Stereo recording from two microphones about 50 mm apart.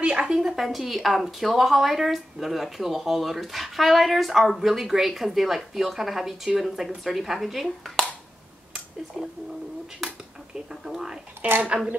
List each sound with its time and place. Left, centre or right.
0.0 s a sound: right
0.4 s a woman's voice: centre
7.6 s speech: centre
10.7 s speech: centre
11.4 s speech: right